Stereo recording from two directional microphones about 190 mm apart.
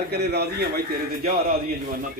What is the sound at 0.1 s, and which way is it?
A man's voice, 60° right (ahead or behind).